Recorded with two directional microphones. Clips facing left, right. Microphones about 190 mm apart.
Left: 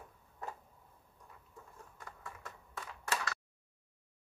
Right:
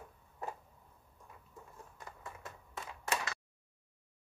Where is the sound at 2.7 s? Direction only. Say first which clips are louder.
Right 1 dB; 20° right (ahead or behind).